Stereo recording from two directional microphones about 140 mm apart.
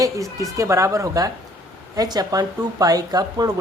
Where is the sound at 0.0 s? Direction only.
25° right (ahead or behind).